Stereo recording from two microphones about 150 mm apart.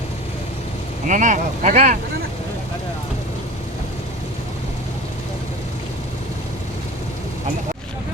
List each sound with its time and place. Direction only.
1.0 s speech: 60° right (ahead or behind)